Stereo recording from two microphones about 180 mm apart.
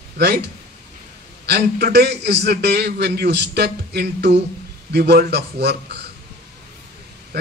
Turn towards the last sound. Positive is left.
turn(degrees=-65)  # may be behind; listen again after turning